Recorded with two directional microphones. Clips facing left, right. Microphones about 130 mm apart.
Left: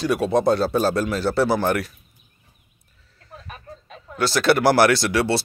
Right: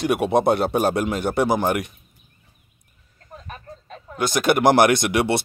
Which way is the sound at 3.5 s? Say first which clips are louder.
Right 2 dB; 5° left (ahead or behind).